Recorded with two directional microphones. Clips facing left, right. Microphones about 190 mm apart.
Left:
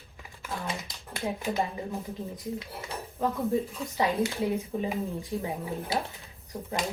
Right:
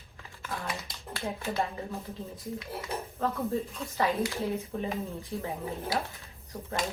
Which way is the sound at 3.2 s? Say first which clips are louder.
Left 4 dB; 15° left (ahead or behind).